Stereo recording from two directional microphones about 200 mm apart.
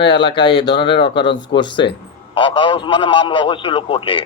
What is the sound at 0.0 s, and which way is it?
A man's voice, 25° left (ahead or behind).